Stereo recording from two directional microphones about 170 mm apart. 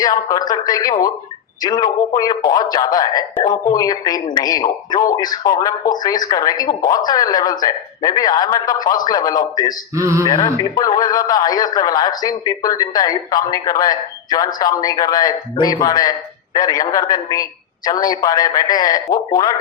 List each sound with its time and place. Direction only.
0.0 s speech: 20° left (ahead or behind)
9.9 s speech: 15° right (ahead or behind)
10.2 s speech: 25° left (ahead or behind)